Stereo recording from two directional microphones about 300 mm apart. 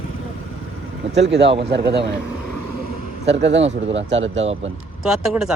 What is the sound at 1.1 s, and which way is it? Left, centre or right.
Speech, right.